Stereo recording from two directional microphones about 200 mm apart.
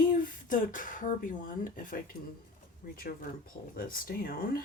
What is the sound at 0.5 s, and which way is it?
Speech, 40° left (ahead or behind).